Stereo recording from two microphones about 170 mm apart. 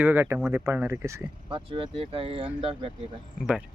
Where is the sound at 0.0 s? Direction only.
10° right (ahead or behind).